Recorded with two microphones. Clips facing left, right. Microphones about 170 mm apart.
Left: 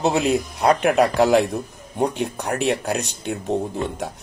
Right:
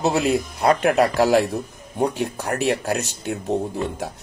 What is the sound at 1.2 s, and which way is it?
Speech, 55° left (ahead or behind).